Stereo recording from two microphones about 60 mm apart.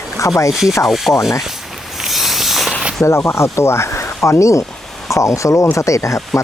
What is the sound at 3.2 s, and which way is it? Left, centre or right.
Speech, left.